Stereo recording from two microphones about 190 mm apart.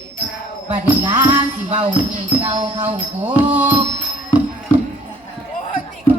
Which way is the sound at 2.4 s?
25° right (ahead or behind).